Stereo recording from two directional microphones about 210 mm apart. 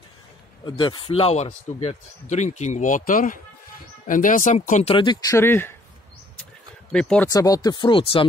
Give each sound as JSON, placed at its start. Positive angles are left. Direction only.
{"t": 0.7, "sound": "speech", "side_deg": 20}
{"t": 4.9, "sound": "speech", "side_deg": 20}
{"t": 6.9, "sound": "speech", "side_deg": 5}
{"t": 7.2, "sound": "speech", "side_deg": 15}